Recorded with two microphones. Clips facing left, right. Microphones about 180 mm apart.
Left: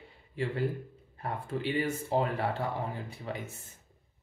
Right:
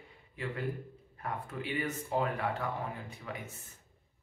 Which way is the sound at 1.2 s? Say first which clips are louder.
Left 5 dB; 30° left (ahead or behind).